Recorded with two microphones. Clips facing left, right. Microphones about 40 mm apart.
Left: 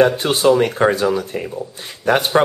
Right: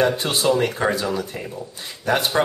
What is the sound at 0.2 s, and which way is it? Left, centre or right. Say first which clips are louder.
Speech: left 5 dB; left.